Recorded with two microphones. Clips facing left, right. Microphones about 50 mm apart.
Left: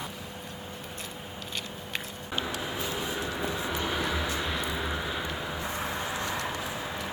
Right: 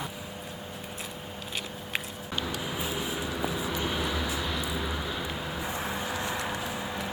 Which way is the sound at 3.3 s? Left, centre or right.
Centre.